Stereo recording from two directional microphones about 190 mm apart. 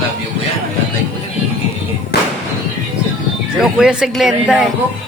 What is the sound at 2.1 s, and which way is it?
Fireworks, 60° left (ahead or behind).